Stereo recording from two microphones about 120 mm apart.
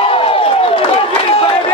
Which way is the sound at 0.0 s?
50° left (ahead or behind).